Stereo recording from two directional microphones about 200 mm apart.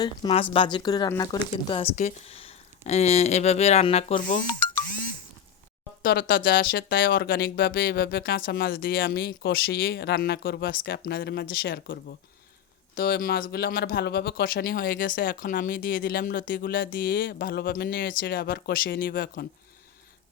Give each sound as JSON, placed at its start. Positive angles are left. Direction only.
{"t": 0.0, "sound": "speech", "side_deg": 25}
{"t": 1.6, "sound": "speech", "side_deg": 30}
{"t": 4.2, "sound": "speech", "side_deg": 45}
{"t": 6.0, "sound": "speech", "side_deg": 45}